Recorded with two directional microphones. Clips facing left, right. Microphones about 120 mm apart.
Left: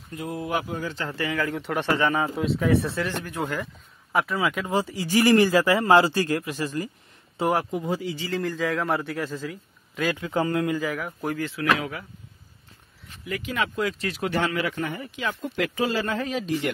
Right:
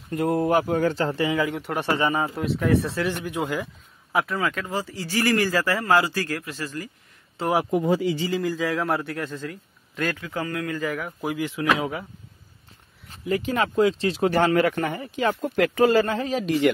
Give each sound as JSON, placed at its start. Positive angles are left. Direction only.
{"t": 0.1, "sound": "speech", "side_deg": -55}
{"t": 1.1, "sound": "speech", "side_deg": -20}
{"t": 1.5, "sound": "a man's voice", "side_deg": -5}
{"t": 3.1, "sound": "speech", "side_deg": -15}
{"t": 4.5, "sound": "speech", "side_deg": 15}
{"t": 7.7, "sound": "speech", "side_deg": -90}
{"t": 8.3, "sound": "a man's voice", "side_deg": 0}
{"t": 10.1, "sound": "speech", "side_deg": 25}
{"t": 10.8, "sound": "a man's voice", "side_deg": 0}
{"t": 11.8, "sound": "speech", "side_deg": -25}
{"t": 13.1, "sound": "speech", "side_deg": -30}
{"t": 14.3, "sound": "speech", "side_deg": -45}
{"t": 15.0, "sound": "speech", "side_deg": -40}
{"t": 16.1, "sound": "speech", "side_deg": -35}